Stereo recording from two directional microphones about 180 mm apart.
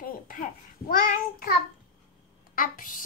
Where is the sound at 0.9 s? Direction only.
50° left (ahead or behind).